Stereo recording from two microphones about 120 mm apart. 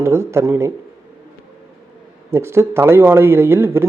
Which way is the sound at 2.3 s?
20° right (ahead or behind).